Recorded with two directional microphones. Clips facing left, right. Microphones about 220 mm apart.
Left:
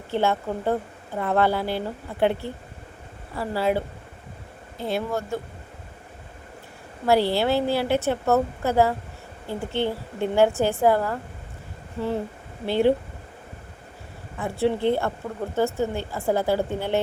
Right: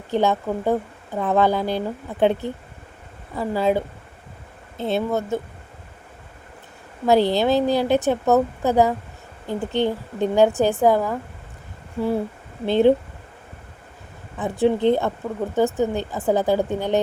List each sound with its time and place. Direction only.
0.1 s speech: 15° right (ahead or behind)
7.1 s speech: 20° right (ahead or behind)
12.6 s speech: 20° right (ahead or behind)
14.3 s speech: 15° right (ahead or behind)